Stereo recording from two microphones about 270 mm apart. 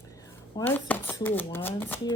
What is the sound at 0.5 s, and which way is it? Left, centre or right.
Speech, centre.